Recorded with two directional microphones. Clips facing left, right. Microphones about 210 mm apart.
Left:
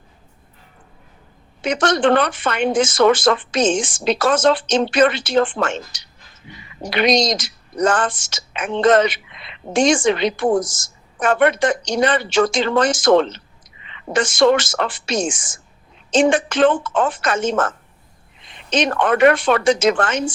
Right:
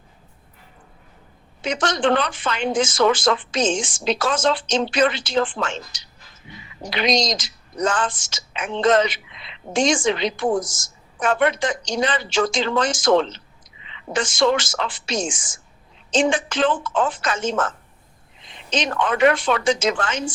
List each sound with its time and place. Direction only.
1.6 s speech: 65° left (ahead or behind)